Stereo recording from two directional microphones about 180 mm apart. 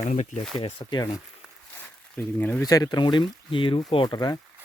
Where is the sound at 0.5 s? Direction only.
25° left (ahead or behind).